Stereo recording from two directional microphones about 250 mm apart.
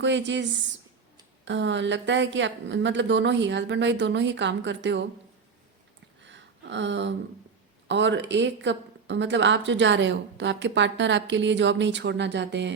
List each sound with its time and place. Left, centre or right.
0.0 s speech: right
1.5 s speech: right
6.2 s a sound: right
7.9 s speech: right